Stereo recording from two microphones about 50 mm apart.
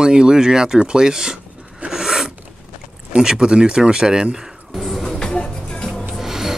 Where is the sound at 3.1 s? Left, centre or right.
Centre.